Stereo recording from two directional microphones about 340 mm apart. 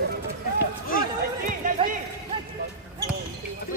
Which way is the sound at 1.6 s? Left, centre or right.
Right.